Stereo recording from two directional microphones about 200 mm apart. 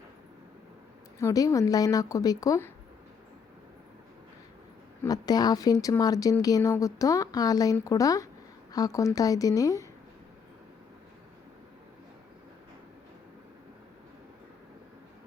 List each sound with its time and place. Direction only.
1.2 s a woman's voice: 15° left (ahead or behind)
5.0 s a woman's voice: 20° left (ahead or behind)